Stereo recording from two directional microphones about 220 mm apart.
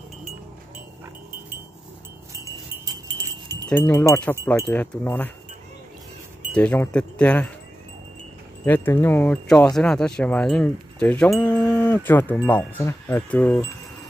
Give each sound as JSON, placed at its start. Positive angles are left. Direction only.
{"t": 2.4, "sound": "wind chime", "side_deg": -15}
{"t": 3.6, "sound": "speech", "side_deg": 10}
{"t": 6.5, "sound": "speech", "side_deg": 5}
{"t": 8.6, "sound": "speech", "side_deg": 10}